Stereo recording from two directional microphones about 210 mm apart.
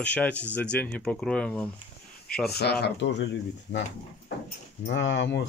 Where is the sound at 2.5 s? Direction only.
50° left (ahead or behind).